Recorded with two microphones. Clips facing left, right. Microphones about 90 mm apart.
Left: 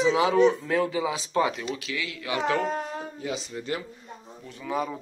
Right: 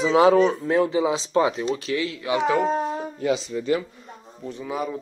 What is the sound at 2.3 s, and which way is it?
Speech, 20° right (ahead or behind).